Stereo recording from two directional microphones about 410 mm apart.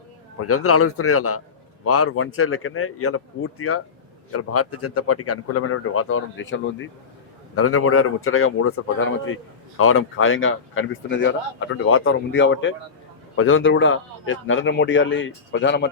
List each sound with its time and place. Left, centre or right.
0.3 s speech: left